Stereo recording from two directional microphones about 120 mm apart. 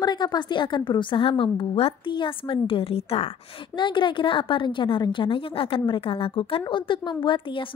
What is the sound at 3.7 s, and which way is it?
A woman's voice, 40° left (ahead or behind).